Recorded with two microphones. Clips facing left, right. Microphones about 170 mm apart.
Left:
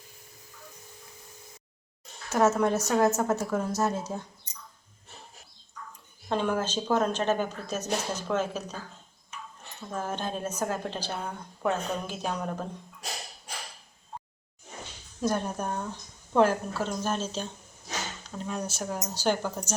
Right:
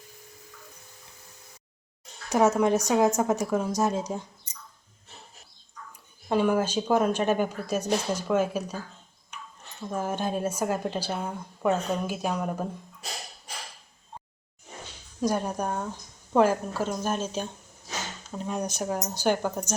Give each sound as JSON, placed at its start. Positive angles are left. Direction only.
{"t": 2.3, "sound": "a woman's voice", "side_deg": -15}
{"t": 6.2, "sound": "a woman's voice", "side_deg": -10}
{"t": 9.9, "sound": "a woman's voice", "side_deg": -10}
{"t": 15.2, "sound": "a woman's voice", "side_deg": -10}